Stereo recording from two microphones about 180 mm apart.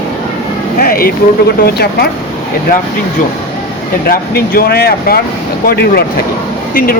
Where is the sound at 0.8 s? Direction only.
55° left (ahead or behind).